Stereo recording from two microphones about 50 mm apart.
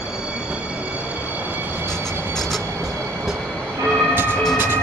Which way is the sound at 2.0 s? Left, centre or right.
Right.